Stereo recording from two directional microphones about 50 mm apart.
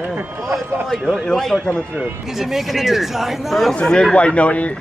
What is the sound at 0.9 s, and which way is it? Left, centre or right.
Speech, centre.